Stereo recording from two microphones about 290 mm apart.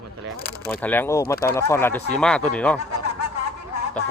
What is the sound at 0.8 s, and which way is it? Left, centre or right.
A man's voice, centre.